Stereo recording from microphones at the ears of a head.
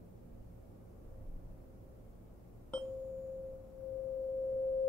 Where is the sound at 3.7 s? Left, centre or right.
Left.